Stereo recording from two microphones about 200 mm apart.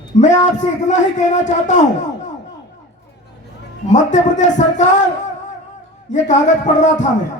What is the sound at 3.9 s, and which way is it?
Speech, 40° left (ahead or behind).